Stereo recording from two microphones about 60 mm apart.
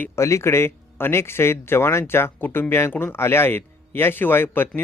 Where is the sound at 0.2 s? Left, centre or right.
Left.